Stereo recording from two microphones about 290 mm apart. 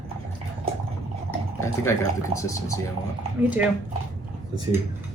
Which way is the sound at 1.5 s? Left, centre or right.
Centre.